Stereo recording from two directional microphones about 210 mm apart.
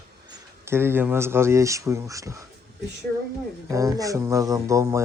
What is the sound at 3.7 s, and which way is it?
Speech, 15° right (ahead or behind).